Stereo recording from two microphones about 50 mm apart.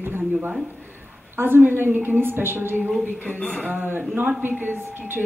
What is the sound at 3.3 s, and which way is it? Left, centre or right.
Speech, left.